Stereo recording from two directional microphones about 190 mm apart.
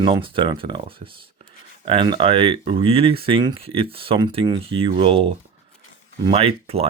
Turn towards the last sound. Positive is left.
turn(degrees=-30)  # may be behind; listen again after turning